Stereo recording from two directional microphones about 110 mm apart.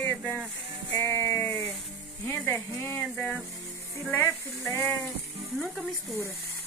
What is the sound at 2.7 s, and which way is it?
Music, 25° left (ahead or behind).